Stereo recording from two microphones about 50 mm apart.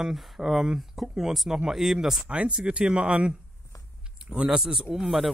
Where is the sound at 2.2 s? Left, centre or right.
Right.